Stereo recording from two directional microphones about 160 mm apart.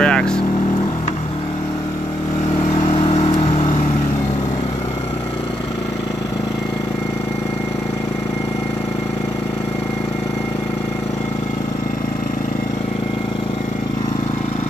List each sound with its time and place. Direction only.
0.0 s vehicle: 5° left (ahead or behind)
2.9 s vehicle: 35° left (ahead or behind)